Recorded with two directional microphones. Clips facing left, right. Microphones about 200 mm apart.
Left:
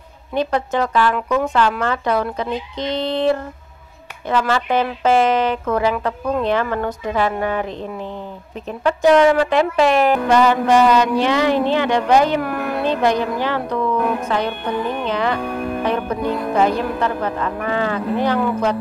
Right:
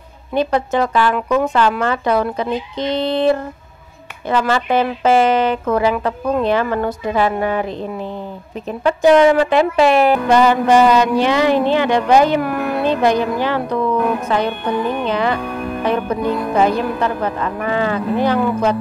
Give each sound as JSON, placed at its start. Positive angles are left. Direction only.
{"t": 0.3, "sound": "a man's voice", "side_deg": -10}
{"t": 4.6, "sound": "a man's voice", "side_deg": -5}
{"t": 9.2, "sound": "a man's voice", "side_deg": -15}
{"t": 9.5, "sound": "a man's voice", "side_deg": -5}
{"t": 15.4, "sound": "music", "side_deg": 35}
{"t": 15.8, "sound": "a man's voice", "side_deg": -10}